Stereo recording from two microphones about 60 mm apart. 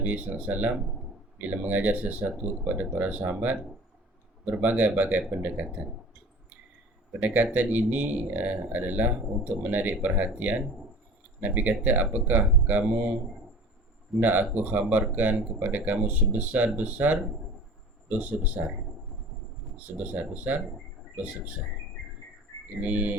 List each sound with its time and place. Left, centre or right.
0.0 s speech: right
4.6 s speech: right
7.2 s speech: right
14.2 s speech: right
20.1 s speech: right
22.8 s speech: right